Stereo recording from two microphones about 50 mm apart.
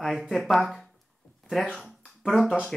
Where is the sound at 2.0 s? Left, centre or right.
Centre.